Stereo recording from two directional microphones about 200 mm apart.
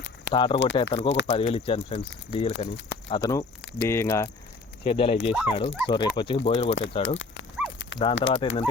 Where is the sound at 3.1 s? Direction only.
15° left (ahead or behind).